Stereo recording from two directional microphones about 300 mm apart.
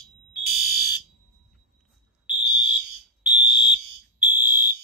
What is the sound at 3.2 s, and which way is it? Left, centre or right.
Fire alarm, centre.